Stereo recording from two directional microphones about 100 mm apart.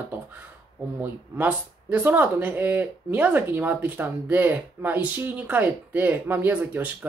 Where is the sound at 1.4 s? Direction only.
15° right (ahead or behind).